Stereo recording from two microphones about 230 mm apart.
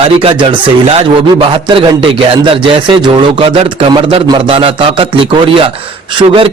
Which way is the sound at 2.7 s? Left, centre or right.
Right.